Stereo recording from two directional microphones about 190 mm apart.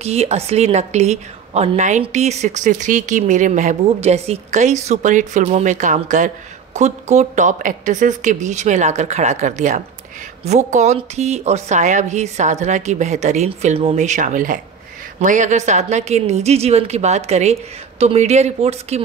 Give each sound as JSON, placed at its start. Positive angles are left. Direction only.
{"t": 0.0, "sound": "speech", "side_deg": -35}